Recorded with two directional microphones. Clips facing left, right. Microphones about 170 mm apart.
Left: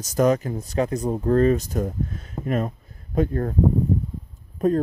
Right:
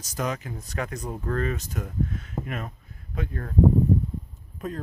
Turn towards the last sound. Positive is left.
turn(degrees=40)  # may be behind; listen again after turning